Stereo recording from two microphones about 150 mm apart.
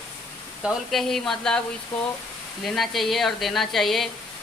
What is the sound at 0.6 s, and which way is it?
Speech, centre (ahead or behind).